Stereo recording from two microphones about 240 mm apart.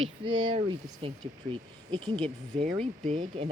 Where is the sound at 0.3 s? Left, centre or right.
Right.